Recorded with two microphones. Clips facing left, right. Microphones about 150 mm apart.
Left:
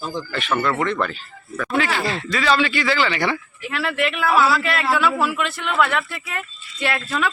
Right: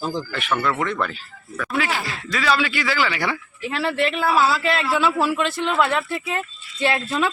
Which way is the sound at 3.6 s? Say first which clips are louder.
Right 2 dB; 30° right (ahead or behind).